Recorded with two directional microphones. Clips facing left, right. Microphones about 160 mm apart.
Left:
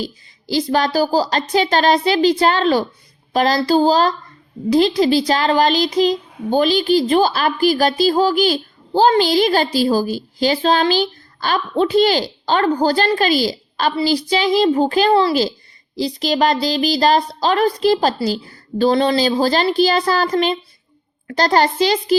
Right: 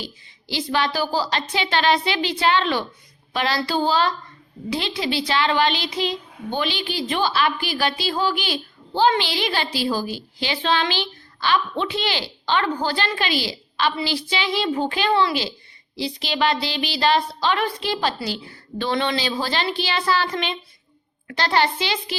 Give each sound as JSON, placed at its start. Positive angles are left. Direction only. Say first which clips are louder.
{"t": 0.0, "sound": "a woman's voice", "louder": "left 9 dB", "side_deg": 40}